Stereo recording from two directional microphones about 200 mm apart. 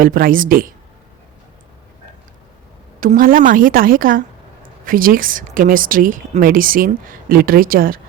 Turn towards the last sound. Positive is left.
turn(degrees=-45)  # may be behind; listen again after turning